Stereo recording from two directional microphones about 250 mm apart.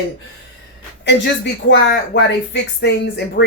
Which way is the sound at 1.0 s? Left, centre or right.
Left.